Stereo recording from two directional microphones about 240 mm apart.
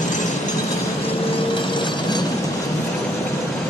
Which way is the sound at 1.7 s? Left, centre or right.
Centre.